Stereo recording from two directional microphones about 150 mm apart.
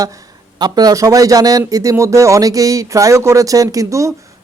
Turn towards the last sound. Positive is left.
turn(degrees=-20)  # may be behind; listen again after turning